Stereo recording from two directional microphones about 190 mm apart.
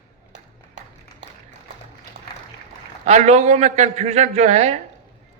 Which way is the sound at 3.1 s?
35° right (ahead or behind).